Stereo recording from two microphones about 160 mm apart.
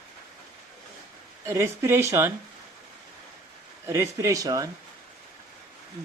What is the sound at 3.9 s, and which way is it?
Speech, 15° right (ahead or behind).